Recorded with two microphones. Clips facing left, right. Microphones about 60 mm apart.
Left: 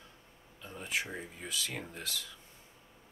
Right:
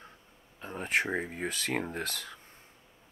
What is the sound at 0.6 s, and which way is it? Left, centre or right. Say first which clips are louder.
Speech: right 7 dB; right.